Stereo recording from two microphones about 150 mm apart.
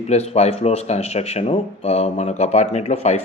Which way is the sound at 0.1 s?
45° left (ahead or behind).